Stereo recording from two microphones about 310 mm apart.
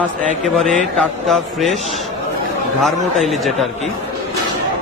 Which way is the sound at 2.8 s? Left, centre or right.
Centre.